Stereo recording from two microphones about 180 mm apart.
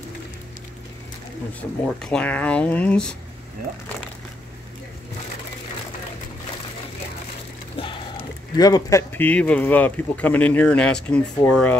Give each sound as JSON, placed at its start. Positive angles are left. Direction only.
{"t": 1.9, "sound": "speech", "side_deg": 5}
{"t": 7.7, "sound": "music", "side_deg": 30}
{"t": 8.5, "sound": "speech", "side_deg": 20}
{"t": 9.1, "sound": "speech", "side_deg": 10}